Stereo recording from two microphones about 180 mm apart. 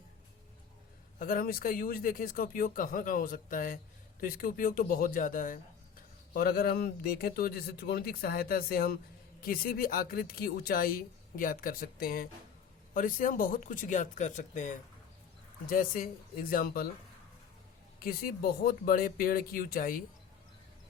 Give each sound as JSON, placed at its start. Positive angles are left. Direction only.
{"t": 1.2, "sound": "speech", "side_deg": 55}
{"t": 18.0, "sound": "speech", "side_deg": 55}